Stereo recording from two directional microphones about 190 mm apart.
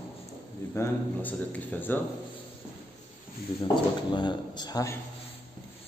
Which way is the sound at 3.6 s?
25° left (ahead or behind).